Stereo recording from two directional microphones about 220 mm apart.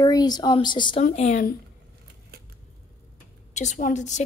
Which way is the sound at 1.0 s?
35° left (ahead or behind).